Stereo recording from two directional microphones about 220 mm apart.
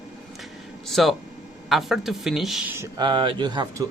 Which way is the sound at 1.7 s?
Centre (ahead or behind).